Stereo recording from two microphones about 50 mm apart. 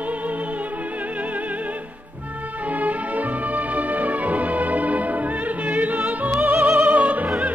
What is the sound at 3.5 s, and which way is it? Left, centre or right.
Music, right.